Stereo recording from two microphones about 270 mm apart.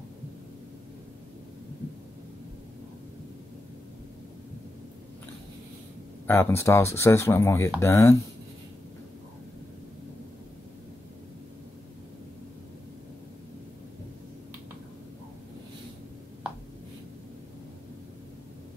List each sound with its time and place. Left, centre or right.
6.2 s speech: centre